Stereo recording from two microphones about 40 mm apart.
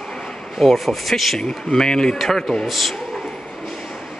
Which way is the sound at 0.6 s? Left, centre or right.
Centre.